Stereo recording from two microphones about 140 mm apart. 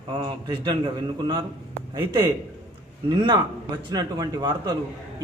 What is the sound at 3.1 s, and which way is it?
A man's voice, 30° right (ahead or behind).